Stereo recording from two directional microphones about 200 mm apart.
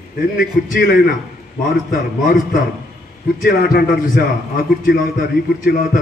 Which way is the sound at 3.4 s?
50° left (ahead or behind).